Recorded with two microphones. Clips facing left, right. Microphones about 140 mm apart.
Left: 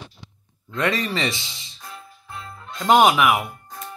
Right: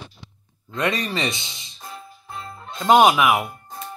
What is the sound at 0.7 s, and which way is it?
Speech, 15° right (ahead or behind).